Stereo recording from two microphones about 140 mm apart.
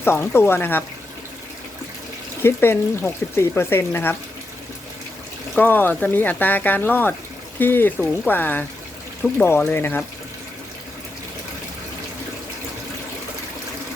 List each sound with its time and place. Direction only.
0.0 s speech: 15° left (ahead or behind)
2.4 s speech: 15° left (ahead or behind)
5.5 s speech: 15° left (ahead or behind)